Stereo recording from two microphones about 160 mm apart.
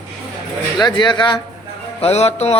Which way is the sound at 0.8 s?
30° left (ahead or behind).